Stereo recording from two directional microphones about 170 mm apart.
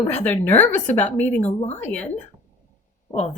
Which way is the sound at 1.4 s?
40° left (ahead or behind).